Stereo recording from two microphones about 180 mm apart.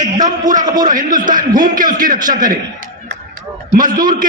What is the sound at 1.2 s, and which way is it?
Speech, 50° right (ahead or behind).